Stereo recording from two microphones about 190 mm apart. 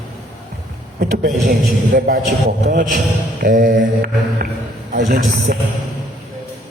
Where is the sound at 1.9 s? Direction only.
45° right (ahead or behind).